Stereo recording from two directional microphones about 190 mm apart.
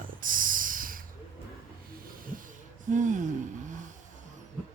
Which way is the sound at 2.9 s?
40° right (ahead or behind).